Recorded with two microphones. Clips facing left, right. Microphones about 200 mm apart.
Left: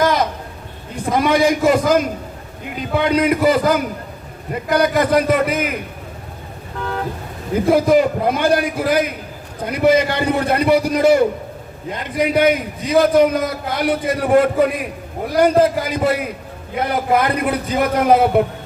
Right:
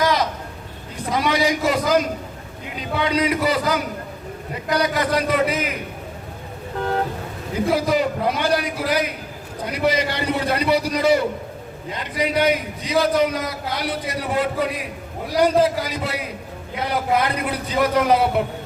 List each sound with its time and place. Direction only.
0.0 s a sound: 50° left (ahead or behind)
1.1 s a man's voice: 50° left (ahead or behind)
7.5 s a man's voice: 50° left (ahead or behind)